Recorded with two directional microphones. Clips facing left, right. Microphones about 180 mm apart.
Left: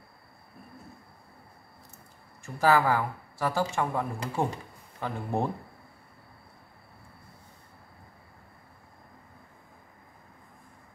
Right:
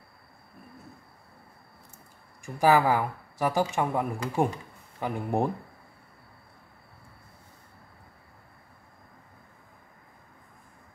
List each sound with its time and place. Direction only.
2.4 s speech: 15° right (ahead or behind)